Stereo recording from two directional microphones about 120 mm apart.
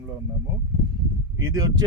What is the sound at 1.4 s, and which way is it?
Speech, 30° right (ahead or behind).